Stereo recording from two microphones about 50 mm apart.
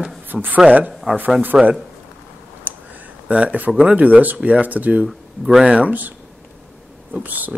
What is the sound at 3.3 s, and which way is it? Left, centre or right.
Speech, right.